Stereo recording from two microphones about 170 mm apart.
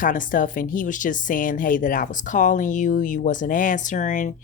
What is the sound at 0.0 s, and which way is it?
Speech, 50° left (ahead or behind).